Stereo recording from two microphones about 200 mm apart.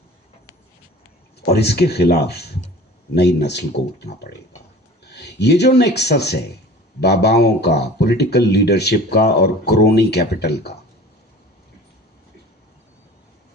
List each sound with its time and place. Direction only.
1.5 s speech: 55° left (ahead or behind)